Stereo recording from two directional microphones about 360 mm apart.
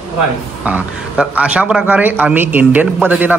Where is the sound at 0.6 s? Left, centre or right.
Centre.